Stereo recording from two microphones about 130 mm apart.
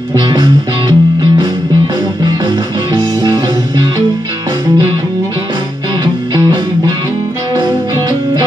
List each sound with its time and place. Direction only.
0.1 s music: 35° right (ahead or behind)
2.2 s music: 35° right (ahead or behind)